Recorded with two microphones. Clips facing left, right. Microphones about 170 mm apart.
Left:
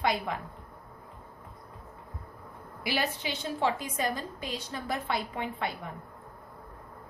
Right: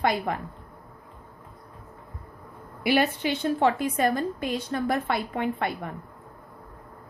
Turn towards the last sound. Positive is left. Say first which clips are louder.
# right 6 dB
turn(degrees=-55)  # may be behind; listen again after turning